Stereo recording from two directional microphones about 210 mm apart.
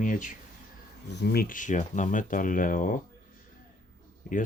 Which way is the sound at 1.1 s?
50° left (ahead or behind).